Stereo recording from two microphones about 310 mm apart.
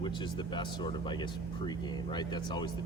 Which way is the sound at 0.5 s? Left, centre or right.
Centre.